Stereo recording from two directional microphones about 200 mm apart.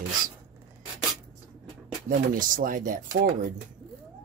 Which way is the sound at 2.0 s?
45° right (ahead or behind).